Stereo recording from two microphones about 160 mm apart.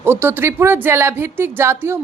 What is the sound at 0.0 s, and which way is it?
A woman's voice, 15° right (ahead or behind).